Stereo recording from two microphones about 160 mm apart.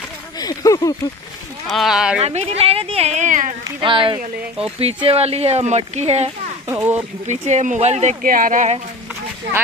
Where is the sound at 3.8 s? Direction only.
30° right (ahead or behind).